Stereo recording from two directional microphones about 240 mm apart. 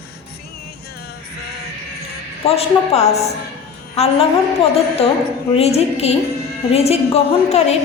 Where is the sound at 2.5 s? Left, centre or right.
Left.